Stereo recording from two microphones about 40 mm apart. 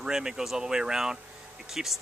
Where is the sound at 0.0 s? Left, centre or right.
Centre.